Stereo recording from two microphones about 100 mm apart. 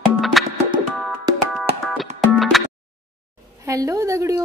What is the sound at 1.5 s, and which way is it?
Music, centre (ahead or behind).